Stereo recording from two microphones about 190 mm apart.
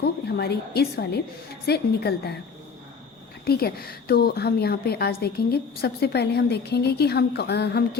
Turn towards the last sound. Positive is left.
turn(degrees=60)  # may be behind; listen again after turning